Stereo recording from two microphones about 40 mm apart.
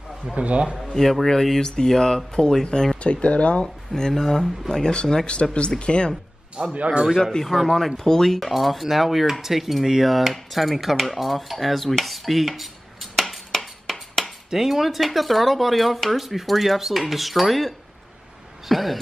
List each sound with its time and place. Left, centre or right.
0.4 s a man's voice: right
1.2 s speech: centre
3.0 s speech: left
3.6 s speech: centre
4.1 s speech: centre
4.6 s speech: centre
6.5 s a man's voice: right
7.7 s speech: centre
8.5 s speech: centre